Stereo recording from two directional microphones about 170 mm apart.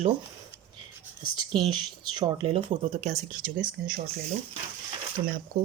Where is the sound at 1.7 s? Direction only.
25° right (ahead or behind).